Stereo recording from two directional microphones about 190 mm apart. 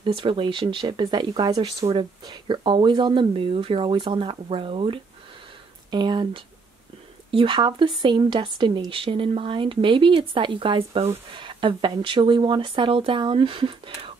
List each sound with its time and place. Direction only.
0.0 s a woman's voice: 25° right (ahead or behind)